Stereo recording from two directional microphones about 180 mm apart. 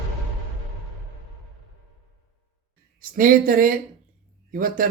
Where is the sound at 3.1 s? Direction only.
50° right (ahead or behind).